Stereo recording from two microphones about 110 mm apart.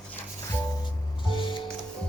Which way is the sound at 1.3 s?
45° left (ahead or behind).